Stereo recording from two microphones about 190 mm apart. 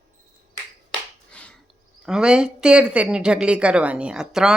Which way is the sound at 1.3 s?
5° left (ahead or behind).